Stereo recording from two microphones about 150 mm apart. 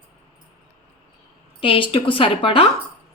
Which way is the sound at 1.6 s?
35° left (ahead or behind).